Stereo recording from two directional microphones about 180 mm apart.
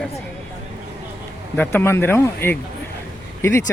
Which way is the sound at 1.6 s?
10° left (ahead or behind).